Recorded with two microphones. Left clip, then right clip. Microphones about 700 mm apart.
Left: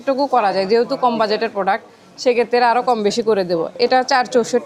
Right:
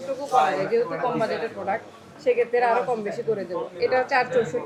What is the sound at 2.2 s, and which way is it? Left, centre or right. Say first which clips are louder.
Speech: left 6 dB; left.